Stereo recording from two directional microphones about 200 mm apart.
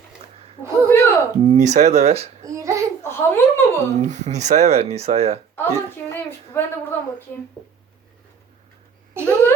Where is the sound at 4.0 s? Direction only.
35° right (ahead or behind).